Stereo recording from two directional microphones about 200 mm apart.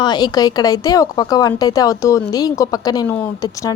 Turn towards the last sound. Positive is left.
turn(degrees=15)  # may be behind; listen again after turning